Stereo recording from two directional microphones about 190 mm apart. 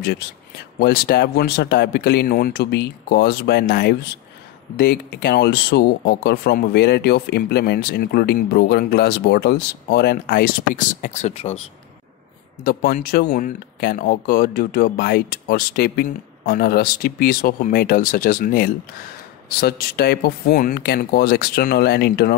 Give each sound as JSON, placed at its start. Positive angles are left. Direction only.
{"t": 0.0, "sound": "speech", "side_deg": 55}
{"t": 12.6, "sound": "speech", "side_deg": 50}